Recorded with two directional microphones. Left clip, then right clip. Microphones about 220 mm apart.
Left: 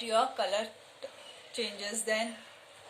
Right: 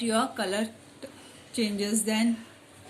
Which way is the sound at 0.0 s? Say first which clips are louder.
Right 1 dB; 25° right (ahead or behind).